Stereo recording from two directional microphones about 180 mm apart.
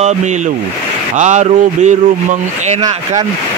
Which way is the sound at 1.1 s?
40° right (ahead or behind).